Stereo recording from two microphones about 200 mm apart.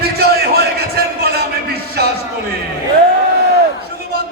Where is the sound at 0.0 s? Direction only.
50° right (ahead or behind).